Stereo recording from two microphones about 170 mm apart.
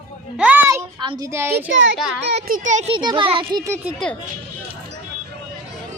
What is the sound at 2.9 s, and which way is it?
Speech, 30° right (ahead or behind).